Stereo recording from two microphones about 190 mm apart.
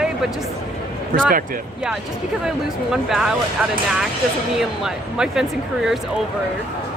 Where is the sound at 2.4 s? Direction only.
5° right (ahead or behind).